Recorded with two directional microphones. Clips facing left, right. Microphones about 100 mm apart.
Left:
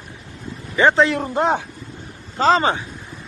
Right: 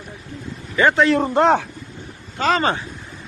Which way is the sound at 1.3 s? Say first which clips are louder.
Right 4 dB; 70° right (ahead or behind).